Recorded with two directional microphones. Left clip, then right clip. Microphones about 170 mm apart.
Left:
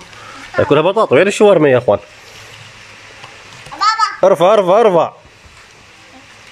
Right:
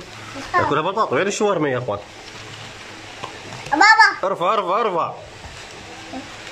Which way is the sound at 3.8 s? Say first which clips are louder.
Right 2 dB; 35° right (ahead or behind).